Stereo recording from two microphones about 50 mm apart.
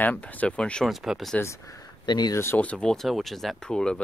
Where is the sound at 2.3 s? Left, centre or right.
Left.